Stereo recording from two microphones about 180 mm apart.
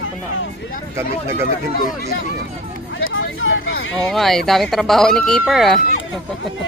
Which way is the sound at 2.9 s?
90° left.